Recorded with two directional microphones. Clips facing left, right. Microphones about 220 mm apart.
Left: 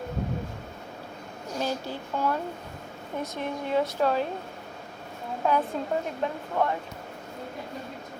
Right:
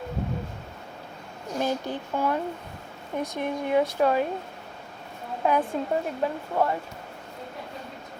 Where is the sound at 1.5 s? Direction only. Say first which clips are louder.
Right 3 dB; 15° right (ahead or behind).